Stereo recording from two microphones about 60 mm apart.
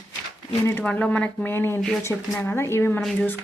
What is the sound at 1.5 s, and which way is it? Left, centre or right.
A woman's voice, left.